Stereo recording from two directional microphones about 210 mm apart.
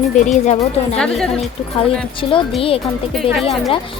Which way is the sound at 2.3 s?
25° left (ahead or behind).